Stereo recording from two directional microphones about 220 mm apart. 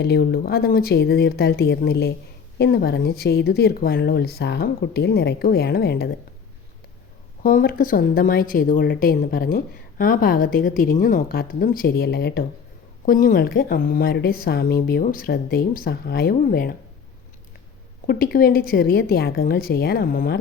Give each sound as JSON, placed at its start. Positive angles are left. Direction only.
{"t": 0.0, "sound": "speech", "side_deg": 45}
{"t": 7.4, "sound": "a woman's voice", "side_deg": 45}
{"t": 18.0, "sound": "a woman's voice", "side_deg": 45}